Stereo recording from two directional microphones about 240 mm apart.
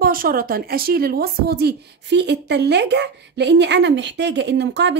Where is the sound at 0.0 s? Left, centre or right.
Right.